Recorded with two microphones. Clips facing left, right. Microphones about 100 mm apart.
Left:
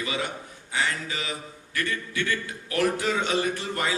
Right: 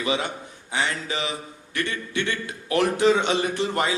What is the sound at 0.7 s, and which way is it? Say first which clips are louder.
A man's voice: right 2 dB; 20° right (ahead or behind).